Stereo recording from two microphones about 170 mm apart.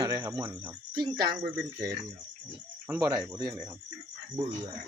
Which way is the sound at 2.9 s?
20° right (ahead or behind).